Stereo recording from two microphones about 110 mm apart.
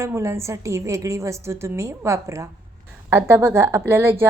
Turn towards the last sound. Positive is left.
turn(degrees=-20)  # may be behind; listen again after turning